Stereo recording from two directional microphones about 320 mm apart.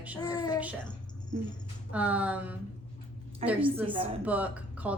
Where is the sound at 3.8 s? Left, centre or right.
Centre.